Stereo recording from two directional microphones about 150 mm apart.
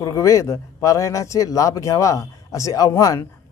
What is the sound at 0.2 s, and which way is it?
Speech, 20° left (ahead or behind).